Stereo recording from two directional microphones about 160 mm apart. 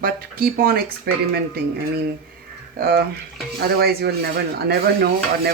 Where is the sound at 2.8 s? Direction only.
75° right (ahead or behind).